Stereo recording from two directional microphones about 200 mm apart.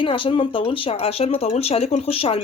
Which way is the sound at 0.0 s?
25° left (ahead or behind).